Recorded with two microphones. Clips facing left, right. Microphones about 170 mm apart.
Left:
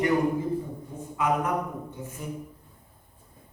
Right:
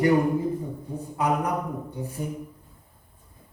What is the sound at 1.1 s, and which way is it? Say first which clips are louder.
Speech: right 1 dB; 35° right (ahead or behind).